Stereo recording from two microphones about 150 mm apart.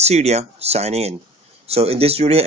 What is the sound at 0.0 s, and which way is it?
Speech, 45° right (ahead or behind).